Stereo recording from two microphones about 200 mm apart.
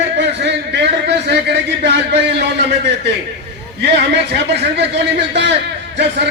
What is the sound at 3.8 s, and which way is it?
Speech, 60° right (ahead or behind).